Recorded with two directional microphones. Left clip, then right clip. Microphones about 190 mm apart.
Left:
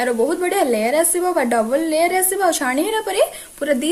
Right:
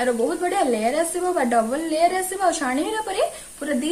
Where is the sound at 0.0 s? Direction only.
50° left (ahead or behind).